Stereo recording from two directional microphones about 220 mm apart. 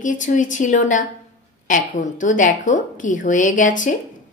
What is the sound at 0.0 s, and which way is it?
A woman's voice, 35° left (ahead or behind).